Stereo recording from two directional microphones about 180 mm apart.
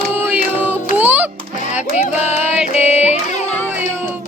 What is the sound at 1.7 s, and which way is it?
Music, 40° left (ahead or behind).